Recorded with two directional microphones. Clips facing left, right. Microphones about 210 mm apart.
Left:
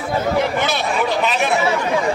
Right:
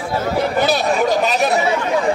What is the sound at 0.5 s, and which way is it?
Speech, 40° right (ahead or behind).